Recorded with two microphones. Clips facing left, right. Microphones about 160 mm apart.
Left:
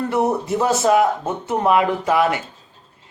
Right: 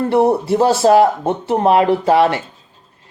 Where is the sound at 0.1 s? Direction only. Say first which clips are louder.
Right 7 dB; 30° right (ahead or behind).